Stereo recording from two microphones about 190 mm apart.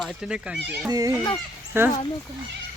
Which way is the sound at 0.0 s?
5° right (ahead or behind).